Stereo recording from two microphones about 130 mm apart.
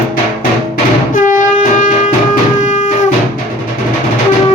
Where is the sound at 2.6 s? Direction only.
70° left (ahead or behind).